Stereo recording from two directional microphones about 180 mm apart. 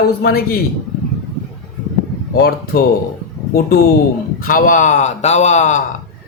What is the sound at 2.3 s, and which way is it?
Speech, 60° left (ahead or behind).